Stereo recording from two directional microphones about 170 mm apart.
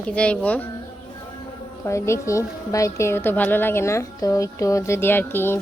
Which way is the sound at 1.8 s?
15° left (ahead or behind).